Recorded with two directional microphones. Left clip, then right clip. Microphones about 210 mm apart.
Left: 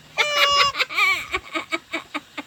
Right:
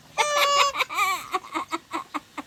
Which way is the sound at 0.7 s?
20° right (ahead or behind).